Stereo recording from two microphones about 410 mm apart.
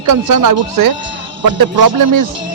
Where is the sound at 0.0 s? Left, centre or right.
Right.